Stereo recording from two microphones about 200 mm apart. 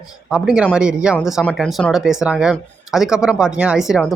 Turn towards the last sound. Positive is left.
turn(degrees=0)  # may be behind; listen again after turning